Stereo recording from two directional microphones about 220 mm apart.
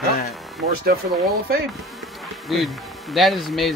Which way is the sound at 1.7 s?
Centre (ahead or behind).